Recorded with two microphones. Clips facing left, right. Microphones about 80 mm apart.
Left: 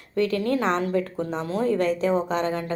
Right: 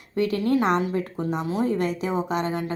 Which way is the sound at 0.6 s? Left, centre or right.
Centre.